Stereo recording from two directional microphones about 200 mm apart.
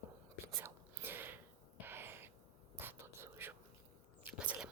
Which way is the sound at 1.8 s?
10° right (ahead or behind).